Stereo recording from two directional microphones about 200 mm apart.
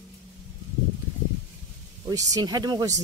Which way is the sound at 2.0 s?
20° right (ahead or behind).